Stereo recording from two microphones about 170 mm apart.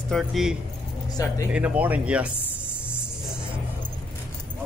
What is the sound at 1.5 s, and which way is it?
Speech, 10° right (ahead or behind).